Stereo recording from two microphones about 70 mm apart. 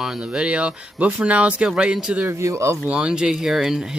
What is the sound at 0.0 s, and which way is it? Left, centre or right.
Speech, centre.